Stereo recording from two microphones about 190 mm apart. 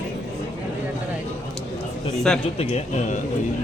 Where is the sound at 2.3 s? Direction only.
5° left (ahead or behind).